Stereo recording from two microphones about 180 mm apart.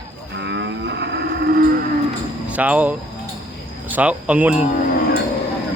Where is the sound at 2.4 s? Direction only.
5° right (ahead or behind).